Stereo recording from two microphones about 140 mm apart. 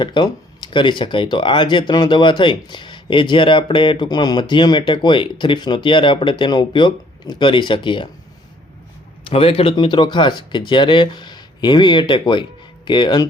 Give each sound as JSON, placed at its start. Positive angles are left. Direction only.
{"t": 0.0, "sound": "speech", "side_deg": 35}
{"t": 9.3, "sound": "speech", "side_deg": 40}